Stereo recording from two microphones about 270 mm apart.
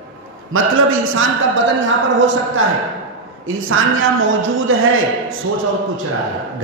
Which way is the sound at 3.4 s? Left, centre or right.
Right.